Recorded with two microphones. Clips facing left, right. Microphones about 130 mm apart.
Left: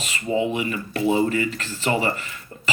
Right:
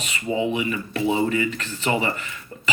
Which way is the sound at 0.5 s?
35° left (ahead or behind).